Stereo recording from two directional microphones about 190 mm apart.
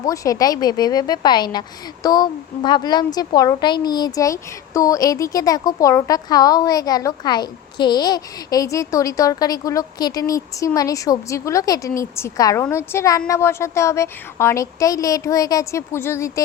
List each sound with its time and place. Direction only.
0.0 s a woman's voice: 20° left (ahead or behind)